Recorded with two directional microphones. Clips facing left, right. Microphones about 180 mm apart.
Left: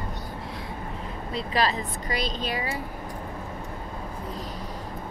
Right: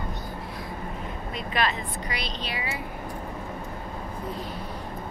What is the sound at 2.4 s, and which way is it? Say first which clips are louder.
Speech: left 3 dB; 45° left (ahead or behind).